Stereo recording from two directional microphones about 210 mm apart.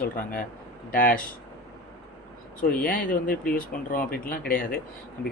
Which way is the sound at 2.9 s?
40° left (ahead or behind).